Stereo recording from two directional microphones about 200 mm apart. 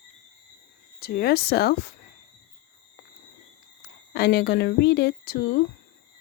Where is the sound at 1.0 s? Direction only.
50° left (ahead or behind).